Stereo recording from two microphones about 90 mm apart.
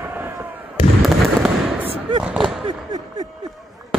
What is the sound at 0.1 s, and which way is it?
Fireworks, 20° right (ahead or behind).